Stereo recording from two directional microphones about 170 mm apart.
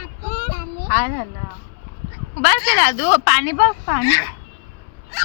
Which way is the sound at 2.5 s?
15° right (ahead or behind).